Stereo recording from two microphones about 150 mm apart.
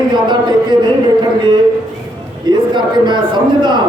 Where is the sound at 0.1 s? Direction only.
30° right (ahead or behind).